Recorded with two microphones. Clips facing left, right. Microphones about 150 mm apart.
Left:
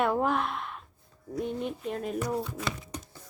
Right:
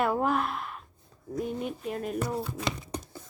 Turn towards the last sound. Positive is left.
turn(degrees=-35)  # may be behind; listen again after turning